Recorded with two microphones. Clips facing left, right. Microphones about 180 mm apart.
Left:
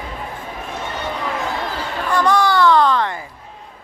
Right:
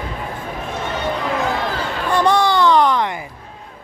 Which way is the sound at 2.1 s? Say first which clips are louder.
Right 1 dB; 25° right (ahead or behind).